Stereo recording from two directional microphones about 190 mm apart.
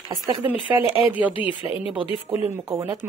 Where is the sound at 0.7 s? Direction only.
15° right (ahead or behind).